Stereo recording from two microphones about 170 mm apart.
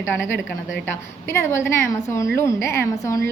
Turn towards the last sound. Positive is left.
turn(degrees=15)  # may be behind; listen again after turning